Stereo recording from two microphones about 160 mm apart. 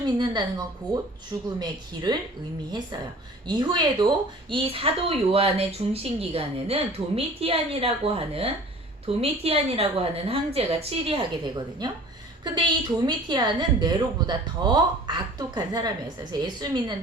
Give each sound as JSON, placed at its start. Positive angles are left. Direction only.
{"t": 0.0, "sound": "speech", "side_deg": -25}
{"t": 1.5, "sound": "a woman's voice", "side_deg": -25}
{"t": 3.4, "sound": "a woman's voice", "side_deg": -30}